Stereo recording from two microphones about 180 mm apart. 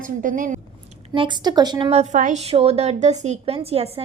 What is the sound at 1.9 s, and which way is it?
A woman's voice, 40° right (ahead or behind).